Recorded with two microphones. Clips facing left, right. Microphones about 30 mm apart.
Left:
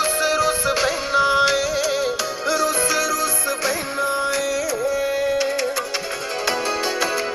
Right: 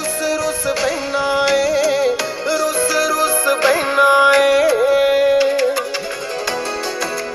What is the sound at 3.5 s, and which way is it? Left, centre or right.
Music, right.